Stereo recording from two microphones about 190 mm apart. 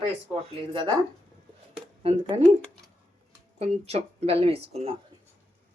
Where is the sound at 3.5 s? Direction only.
35° right (ahead or behind).